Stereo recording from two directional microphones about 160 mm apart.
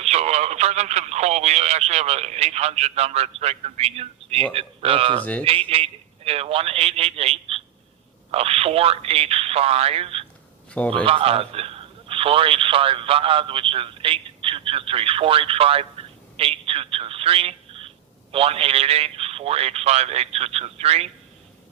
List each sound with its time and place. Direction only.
0.0 s speech: 40° right (ahead or behind)
5.2 s speech: 10° left (ahead or behind)
5.5 s speech: 35° right (ahead or behind)
10.7 s speech: 10° left (ahead or behind)
10.9 s speech: 35° right (ahead or behind)